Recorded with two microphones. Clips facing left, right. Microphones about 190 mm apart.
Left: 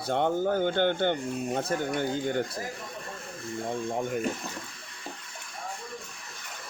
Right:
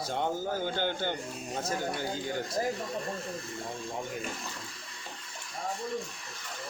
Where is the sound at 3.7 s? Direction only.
55° left (ahead or behind).